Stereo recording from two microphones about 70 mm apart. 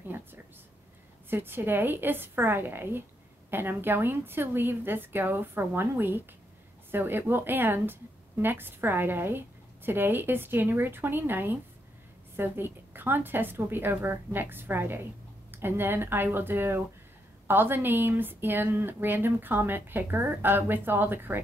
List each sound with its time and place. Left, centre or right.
0.1 s speech: right